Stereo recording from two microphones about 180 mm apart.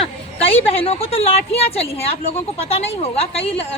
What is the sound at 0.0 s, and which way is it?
A woman's voice, 30° left (ahead or behind).